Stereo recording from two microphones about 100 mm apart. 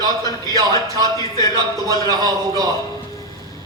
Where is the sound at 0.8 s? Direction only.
35° right (ahead or behind).